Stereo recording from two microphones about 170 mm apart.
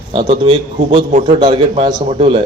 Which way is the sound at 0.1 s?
30° right (ahead or behind).